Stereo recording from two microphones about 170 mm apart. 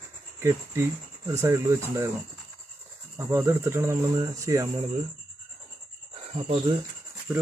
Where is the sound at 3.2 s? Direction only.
15° right (ahead or behind).